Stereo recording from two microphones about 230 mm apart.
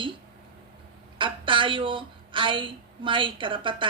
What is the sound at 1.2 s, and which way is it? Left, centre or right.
A woman's voice, right.